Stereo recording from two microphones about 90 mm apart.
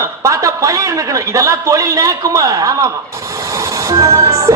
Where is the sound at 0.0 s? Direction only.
35° right (ahead or behind).